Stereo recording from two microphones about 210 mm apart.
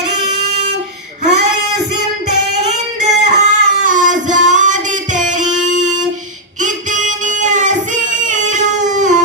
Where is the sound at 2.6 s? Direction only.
35° right (ahead or behind).